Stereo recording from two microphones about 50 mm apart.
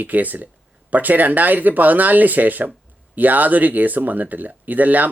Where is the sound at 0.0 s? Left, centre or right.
Right.